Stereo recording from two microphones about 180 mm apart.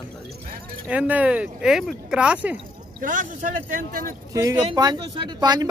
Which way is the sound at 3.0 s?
50° right (ahead or behind).